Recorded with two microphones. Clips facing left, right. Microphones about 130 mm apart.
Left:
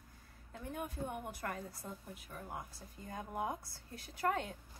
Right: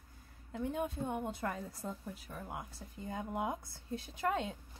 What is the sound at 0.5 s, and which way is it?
A woman's voice, 25° right (ahead or behind).